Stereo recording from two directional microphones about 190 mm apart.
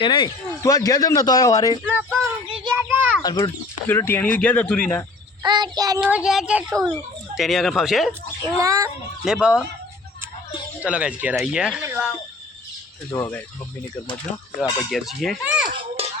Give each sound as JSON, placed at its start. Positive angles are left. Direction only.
{"t": 0.0, "sound": "speech", "side_deg": 25}
{"t": 1.8, "sound": "speech", "side_deg": -10}
{"t": 2.0, "sound": "a sound", "side_deg": 5}
{"t": 2.7, "sound": "a sound", "side_deg": -10}
{"t": 3.2, "sound": "speech", "side_deg": 15}
{"t": 5.4, "sound": "a child's voice", "side_deg": -20}
{"t": 6.0, "sound": "speech", "side_deg": -5}
{"t": 8.6, "sound": "speech", "side_deg": -20}
{"t": 9.2, "sound": "speech", "side_deg": -5}
{"t": 10.8, "sound": "speech", "side_deg": -5}
{"t": 13.1, "sound": "speech", "side_deg": 10}
{"t": 14.8, "sound": "speech", "side_deg": 0}
{"t": 16.0, "sound": "music", "side_deg": -30}